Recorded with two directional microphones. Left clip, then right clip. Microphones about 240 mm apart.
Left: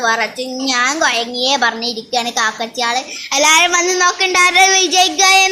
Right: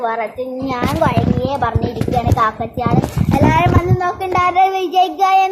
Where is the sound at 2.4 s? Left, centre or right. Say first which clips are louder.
Even; centre.